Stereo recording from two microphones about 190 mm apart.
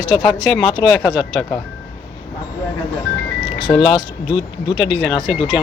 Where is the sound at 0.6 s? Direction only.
25° left (ahead or behind).